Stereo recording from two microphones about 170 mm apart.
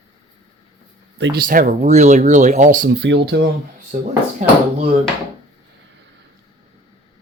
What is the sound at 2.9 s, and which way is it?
Speech, 85° right.